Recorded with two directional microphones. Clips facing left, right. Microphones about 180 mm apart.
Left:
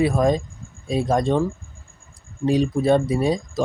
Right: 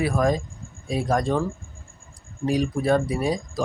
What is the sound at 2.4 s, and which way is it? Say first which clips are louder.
Speech: left 4 dB; 25° left (ahead or behind).